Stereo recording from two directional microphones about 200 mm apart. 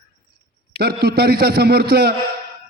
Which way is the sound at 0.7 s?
50° right (ahead or behind).